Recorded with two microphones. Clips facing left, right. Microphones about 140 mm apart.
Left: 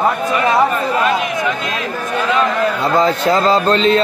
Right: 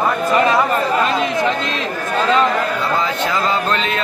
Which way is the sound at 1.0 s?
30° right (ahead or behind).